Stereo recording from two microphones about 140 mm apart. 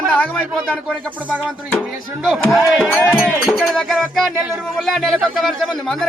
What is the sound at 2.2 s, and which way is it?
A man's voice, centre (ahead or behind).